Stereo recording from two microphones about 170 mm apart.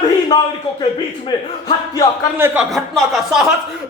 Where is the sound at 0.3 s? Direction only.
20° left (ahead or behind).